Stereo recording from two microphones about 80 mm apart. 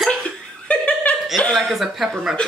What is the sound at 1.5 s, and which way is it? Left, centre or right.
Speech, centre.